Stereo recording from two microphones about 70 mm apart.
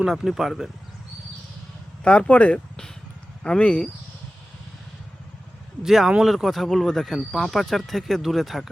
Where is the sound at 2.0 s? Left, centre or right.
Centre.